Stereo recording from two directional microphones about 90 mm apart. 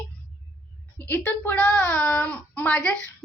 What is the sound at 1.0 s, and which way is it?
A woman's voice, 20° left (ahead or behind).